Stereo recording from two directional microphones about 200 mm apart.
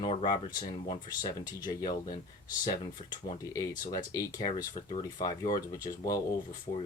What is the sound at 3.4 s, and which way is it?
Speech, 15° left (ahead or behind).